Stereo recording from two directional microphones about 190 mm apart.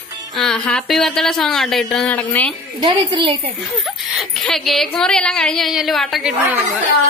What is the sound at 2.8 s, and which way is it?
Speech, 25° right (ahead or behind).